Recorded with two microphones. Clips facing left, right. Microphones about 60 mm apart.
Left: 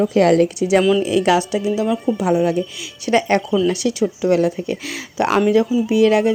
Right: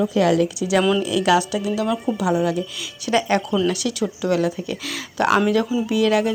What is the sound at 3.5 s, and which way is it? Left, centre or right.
Speech, centre.